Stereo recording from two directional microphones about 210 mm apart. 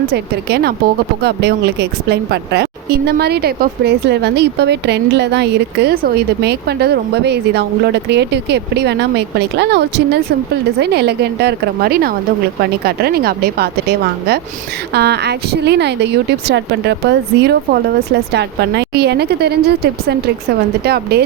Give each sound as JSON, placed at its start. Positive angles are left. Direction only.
{"t": 0.1, "sound": "a woman's voice", "side_deg": -50}